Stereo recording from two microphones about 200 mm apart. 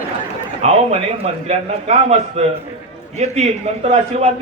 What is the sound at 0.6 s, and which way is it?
A man's voice, 30° right (ahead or behind).